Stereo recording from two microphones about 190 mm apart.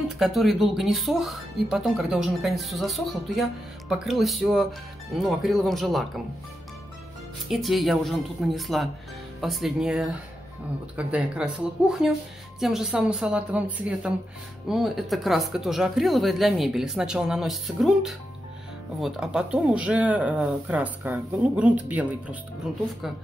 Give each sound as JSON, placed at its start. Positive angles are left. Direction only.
{"t": 0.2, "sound": "speech", "side_deg": 0}
{"t": 7.5, "sound": "speech", "side_deg": 0}